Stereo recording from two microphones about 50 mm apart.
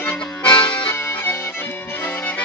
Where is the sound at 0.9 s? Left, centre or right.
Left.